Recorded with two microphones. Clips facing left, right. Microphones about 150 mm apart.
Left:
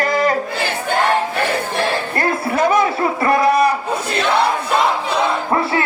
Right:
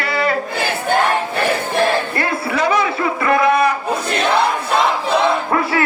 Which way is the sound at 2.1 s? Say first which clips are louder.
Left 1 dB; 45° left (ahead or behind).